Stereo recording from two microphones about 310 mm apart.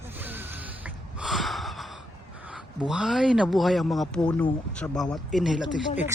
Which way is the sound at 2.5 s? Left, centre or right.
Centre.